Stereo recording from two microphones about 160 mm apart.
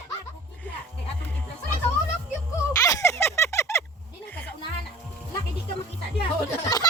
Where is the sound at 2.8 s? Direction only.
20° left (ahead or behind).